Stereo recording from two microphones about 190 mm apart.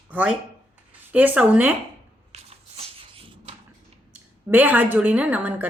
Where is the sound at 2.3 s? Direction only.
30° right (ahead or behind).